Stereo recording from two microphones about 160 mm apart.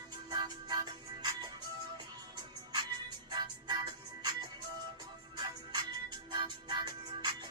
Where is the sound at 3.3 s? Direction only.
25° right (ahead or behind).